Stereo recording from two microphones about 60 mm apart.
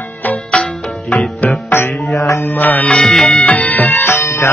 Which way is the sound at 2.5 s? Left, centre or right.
Left.